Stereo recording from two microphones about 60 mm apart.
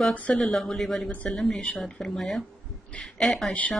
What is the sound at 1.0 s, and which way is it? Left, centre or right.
Speech, left.